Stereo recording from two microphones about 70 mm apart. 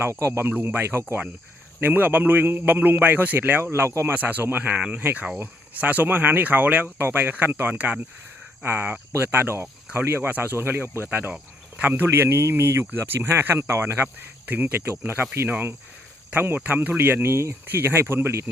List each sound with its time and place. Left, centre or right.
0.1 s a man's voice: right
4.1 s a man's voice: right